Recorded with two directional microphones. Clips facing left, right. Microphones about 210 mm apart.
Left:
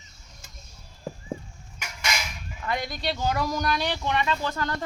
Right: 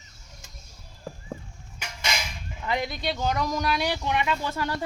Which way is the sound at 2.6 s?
25° right (ahead or behind).